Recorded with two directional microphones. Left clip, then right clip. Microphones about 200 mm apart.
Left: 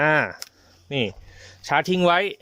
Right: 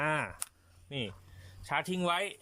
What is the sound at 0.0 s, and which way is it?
Speech, 45° left (ahead or behind).